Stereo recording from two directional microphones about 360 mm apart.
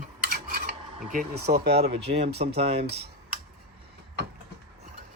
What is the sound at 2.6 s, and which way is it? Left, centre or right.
Speech, centre.